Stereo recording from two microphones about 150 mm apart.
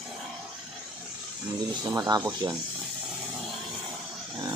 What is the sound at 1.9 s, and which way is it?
Speech, 25° right (ahead or behind).